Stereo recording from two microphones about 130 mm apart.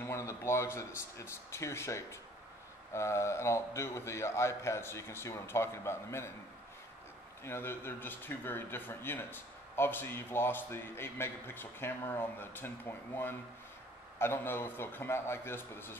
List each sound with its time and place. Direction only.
0.0 s a man's voice: 20° left (ahead or behind)
7.4 s speech: 20° left (ahead or behind)